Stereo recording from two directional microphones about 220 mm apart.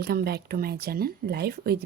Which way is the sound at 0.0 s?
45° right (ahead or behind).